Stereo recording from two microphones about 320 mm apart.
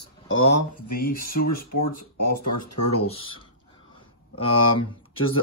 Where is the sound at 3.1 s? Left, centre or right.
Centre.